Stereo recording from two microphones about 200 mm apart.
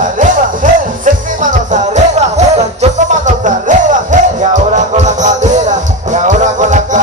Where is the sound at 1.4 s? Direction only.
35° right (ahead or behind).